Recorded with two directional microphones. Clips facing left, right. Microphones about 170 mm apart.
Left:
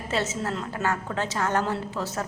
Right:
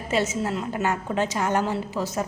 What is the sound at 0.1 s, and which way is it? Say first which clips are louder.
A woman's voice: right 4 dB; 15° right (ahead or behind).